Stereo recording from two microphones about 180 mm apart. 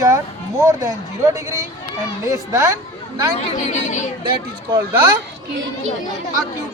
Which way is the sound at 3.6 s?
40° left (ahead or behind).